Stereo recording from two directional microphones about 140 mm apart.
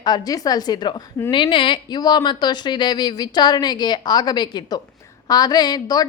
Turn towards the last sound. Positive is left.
turn(degrees=30)  # may be behind; listen again after turning